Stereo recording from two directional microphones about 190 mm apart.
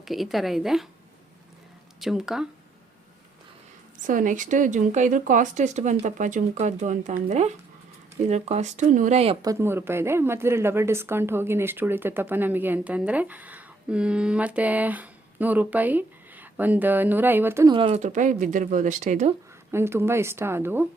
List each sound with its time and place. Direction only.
0.0 s a woman's voice: centre (ahead or behind)
2.0 s a woman's voice: centre (ahead or behind)
4.0 s speech: 45° right (ahead or behind)
9.4 s speech: 15° right (ahead or behind)
17.7 s speech: 30° right (ahead or behind)
19.7 s speech: 15° right (ahead or behind)